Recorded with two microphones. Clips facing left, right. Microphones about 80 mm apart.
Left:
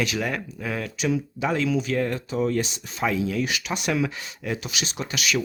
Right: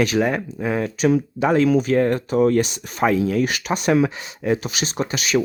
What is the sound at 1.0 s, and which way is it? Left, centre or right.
Speech, right.